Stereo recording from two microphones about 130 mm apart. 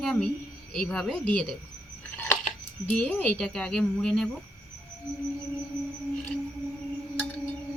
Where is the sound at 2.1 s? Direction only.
15° left (ahead or behind).